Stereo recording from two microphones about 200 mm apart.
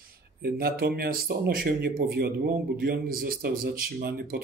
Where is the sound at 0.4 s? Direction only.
50° right (ahead or behind).